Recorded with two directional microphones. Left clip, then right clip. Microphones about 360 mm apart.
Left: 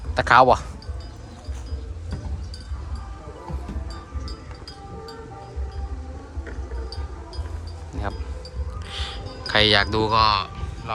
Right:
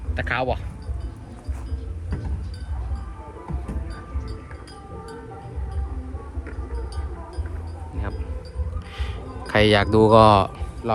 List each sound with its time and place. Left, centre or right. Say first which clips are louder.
0.2 s speech: left 10 dB; centre
8.9 s music: left 6 dB; centre